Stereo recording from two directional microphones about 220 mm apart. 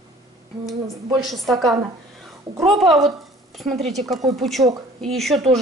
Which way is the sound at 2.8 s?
Centre (ahead or behind).